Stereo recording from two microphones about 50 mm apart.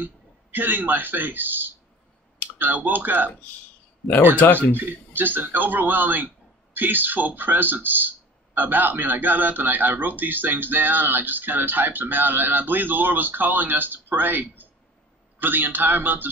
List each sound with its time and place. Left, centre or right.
0.0 s a man's voice: right
4.0 s speech: centre
4.4 s speech: left
4.7 s a man's voice: right